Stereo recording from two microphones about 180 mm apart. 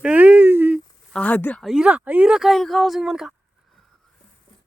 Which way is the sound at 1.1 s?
10° left (ahead or behind).